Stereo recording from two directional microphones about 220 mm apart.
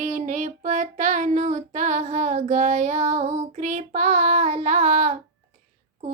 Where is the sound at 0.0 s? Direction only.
30° right (ahead or behind).